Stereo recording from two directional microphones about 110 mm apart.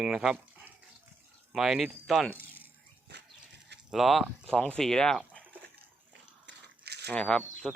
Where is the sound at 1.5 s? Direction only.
5° right (ahead or behind).